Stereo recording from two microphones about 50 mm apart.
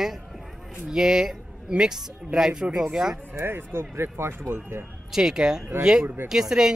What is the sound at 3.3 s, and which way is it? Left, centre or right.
Speech, right.